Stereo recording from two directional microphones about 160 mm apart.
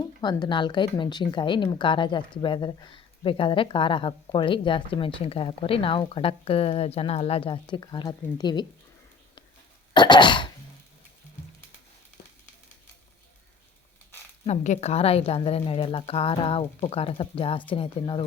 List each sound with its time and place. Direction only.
0.2 s speech: 30° left (ahead or behind)
9.9 s throat clearing: 30° left (ahead or behind)
14.4 s speech: 45° left (ahead or behind)